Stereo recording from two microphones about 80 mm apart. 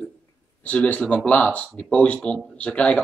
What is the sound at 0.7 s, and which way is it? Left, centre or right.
Speech, centre.